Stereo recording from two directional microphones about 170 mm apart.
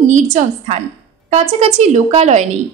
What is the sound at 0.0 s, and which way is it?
A woman's voice, 45° right (ahead or behind).